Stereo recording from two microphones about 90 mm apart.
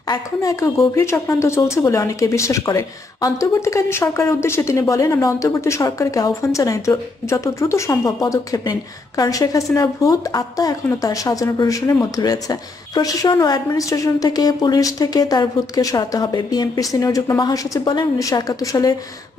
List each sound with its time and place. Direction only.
0.1 s speech: 35° left (ahead or behind)